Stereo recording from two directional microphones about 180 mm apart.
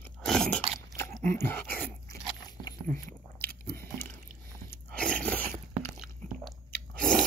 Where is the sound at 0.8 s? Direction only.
15° left (ahead or behind).